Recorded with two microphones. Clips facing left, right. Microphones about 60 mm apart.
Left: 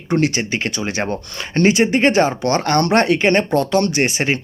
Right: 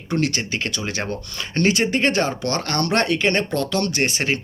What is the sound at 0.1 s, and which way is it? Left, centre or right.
Speech, left.